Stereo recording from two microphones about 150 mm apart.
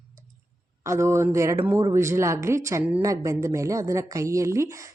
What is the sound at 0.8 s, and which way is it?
A woman's voice, 20° right (ahead or behind).